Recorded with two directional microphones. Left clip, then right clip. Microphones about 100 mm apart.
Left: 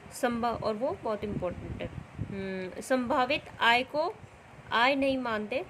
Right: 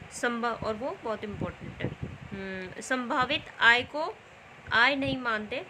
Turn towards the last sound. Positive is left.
turn(degrees=75)  # may be behind; listen again after turning